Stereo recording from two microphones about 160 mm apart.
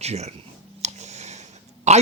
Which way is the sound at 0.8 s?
45° right (ahead or behind).